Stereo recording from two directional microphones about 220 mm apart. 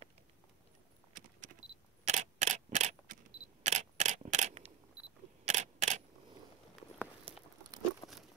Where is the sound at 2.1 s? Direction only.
30° right (ahead or behind).